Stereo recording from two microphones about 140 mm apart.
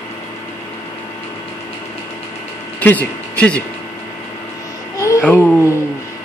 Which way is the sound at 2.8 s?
10° left (ahead or behind).